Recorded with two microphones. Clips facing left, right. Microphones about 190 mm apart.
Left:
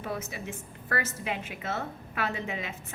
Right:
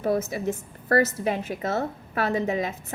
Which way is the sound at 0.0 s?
40° right (ahead or behind).